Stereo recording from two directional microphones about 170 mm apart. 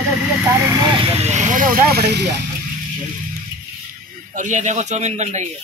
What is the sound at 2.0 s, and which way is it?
Speech, 80° right.